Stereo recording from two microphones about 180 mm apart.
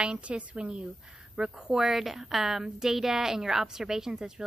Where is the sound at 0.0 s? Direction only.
5° right (ahead or behind).